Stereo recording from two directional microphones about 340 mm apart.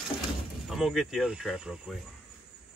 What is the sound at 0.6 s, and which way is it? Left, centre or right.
Speech, centre.